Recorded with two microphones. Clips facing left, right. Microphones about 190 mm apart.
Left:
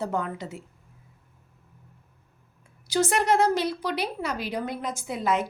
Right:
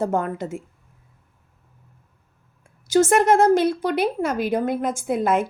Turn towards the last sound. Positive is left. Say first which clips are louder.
# right 6 dB
turn(degrees=-50)  # may be behind; listen again after turning